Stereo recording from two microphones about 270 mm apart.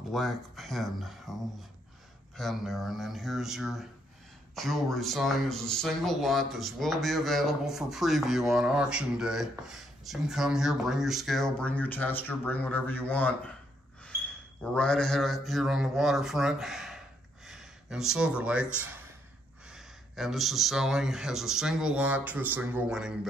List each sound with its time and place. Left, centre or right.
0.1 s speech: centre
2.3 s speech: centre
14.0 s a sound: centre
17.5 s speech: centre